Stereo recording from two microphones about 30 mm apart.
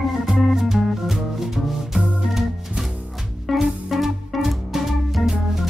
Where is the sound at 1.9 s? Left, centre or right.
Centre.